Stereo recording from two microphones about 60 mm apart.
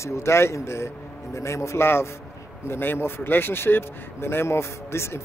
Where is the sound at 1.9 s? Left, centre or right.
Left.